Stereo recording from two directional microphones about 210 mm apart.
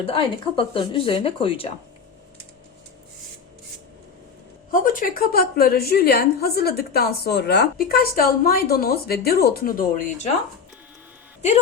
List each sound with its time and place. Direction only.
0.0 s speech: 25° left (ahead or behind)
4.7 s a woman's voice: 40° left (ahead or behind)